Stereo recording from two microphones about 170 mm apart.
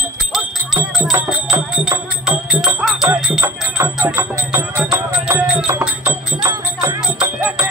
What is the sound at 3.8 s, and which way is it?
Music, 15° right (ahead or behind).